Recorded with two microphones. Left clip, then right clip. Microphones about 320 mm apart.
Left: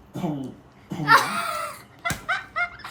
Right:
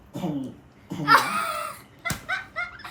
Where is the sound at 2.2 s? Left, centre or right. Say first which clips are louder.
Left 5 dB; centre.